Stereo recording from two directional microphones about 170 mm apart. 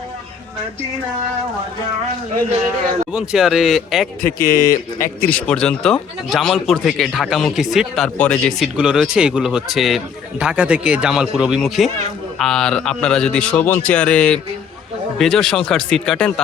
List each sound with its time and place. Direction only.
3.1 s speech: 5° right (ahead or behind)
4.2 s speech: 55° left (ahead or behind)
5.3 s speech: 5° left (ahead or behind)